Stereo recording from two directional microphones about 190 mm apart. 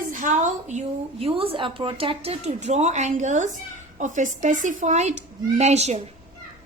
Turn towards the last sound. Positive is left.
turn(degrees=-35)  # may be behind; listen again after turning